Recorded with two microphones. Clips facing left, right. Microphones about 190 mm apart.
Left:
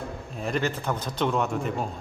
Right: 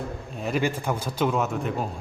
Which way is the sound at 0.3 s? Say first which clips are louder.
Right 2 dB; centre (ahead or behind).